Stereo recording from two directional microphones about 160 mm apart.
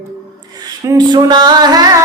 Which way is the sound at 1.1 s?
25° right (ahead or behind).